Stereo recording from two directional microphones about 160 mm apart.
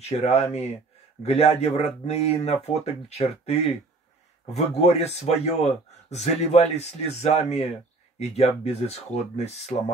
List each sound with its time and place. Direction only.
0.1 s speech: 40° left (ahead or behind)